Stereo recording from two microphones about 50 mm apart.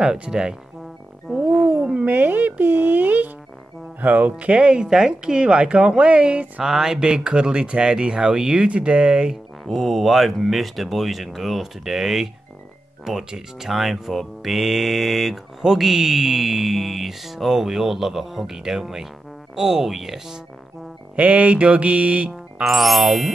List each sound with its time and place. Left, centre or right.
0.0 s speech: centre
1.3 s a sound: centre
2.0 s a woman's voice: right
6.6 s speech: centre
9.7 s speech: centre
21.2 s a woman's voice: right
22.3 s speech: centre